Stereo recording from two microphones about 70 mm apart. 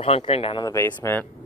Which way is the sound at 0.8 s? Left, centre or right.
Left.